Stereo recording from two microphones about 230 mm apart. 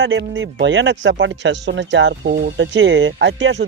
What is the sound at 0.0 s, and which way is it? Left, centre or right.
Speech, right.